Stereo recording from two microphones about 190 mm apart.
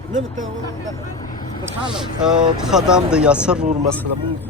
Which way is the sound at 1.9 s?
Centre (ahead or behind).